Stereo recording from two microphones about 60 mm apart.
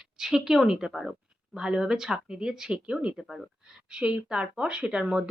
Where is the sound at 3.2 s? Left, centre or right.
Centre.